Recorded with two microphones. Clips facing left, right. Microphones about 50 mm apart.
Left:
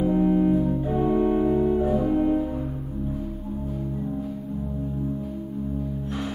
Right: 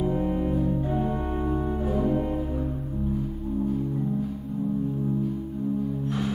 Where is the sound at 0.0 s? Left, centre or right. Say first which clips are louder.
Left 5 dB; centre.